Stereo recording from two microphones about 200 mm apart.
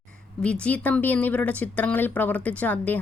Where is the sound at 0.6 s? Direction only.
5° left (ahead or behind).